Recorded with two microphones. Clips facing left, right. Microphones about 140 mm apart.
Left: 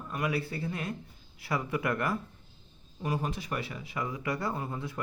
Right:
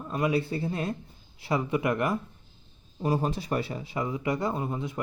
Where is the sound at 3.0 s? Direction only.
35° right (ahead or behind).